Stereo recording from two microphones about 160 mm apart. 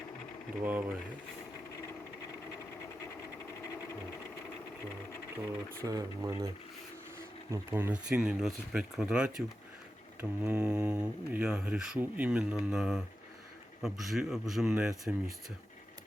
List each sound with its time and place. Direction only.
0.6 s speech: 10° right (ahead or behind)
5.8 s speech: 20° right (ahead or behind)
7.5 s a man's voice: 15° right (ahead or behind)